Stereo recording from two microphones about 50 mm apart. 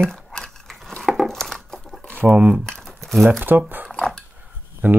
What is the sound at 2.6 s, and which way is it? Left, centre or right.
Crumpling, centre.